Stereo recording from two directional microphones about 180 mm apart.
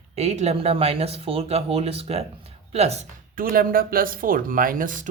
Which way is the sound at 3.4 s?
50° right (ahead or behind).